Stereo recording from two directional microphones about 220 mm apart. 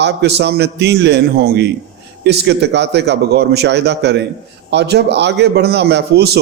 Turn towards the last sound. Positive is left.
turn(degrees=-50)  # may be behind; listen again after turning